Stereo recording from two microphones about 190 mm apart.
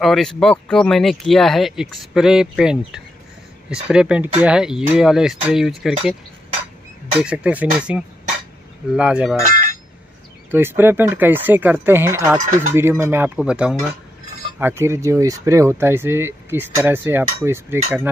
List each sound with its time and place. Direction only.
0.0 s speech: centre (ahead or behind)
7.2 s speech: 5° right (ahead or behind)
9.4 s a sound: 45° right (ahead or behind)
10.5 s speech: 10° right (ahead or behind)